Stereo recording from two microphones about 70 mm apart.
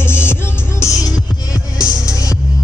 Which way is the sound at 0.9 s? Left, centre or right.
Left.